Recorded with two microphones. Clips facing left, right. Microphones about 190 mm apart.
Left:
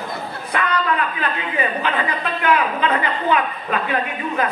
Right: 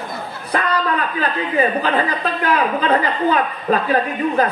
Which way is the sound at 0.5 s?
40° right (ahead or behind).